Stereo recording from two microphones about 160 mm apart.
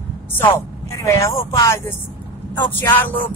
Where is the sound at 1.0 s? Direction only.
20° left (ahead or behind).